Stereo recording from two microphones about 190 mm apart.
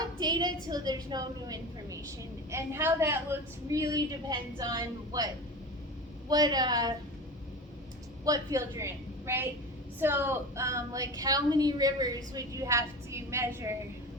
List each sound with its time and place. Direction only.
0.2 s a woman's voice: 20° right (ahead or behind)
8.2 s a woman's voice: 20° right (ahead or behind)